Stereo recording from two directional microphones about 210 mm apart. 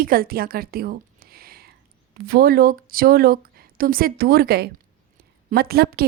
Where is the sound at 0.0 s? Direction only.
45° right (ahead or behind).